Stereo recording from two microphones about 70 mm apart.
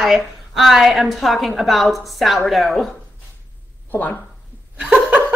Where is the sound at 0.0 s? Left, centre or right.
Centre.